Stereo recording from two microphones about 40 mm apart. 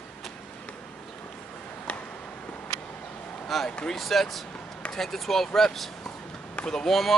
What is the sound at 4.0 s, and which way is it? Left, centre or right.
Speech, centre.